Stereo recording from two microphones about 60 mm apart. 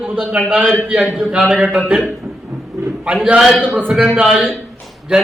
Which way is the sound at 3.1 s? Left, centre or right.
Centre.